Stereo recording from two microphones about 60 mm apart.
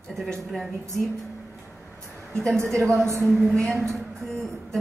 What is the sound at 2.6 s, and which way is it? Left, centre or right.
Speech, right.